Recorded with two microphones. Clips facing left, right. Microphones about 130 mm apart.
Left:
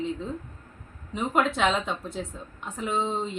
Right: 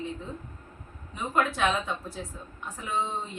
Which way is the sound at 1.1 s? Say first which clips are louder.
Left 3 dB; 20° left (ahead or behind).